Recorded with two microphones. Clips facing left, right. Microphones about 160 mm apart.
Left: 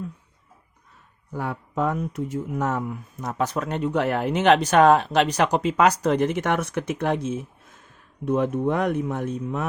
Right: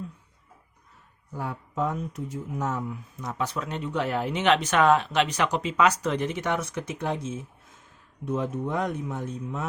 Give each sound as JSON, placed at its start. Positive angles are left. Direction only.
{"t": 1.3, "sound": "speech", "side_deg": 80}